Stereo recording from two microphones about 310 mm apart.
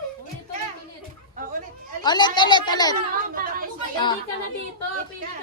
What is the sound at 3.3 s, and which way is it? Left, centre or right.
Speech, right.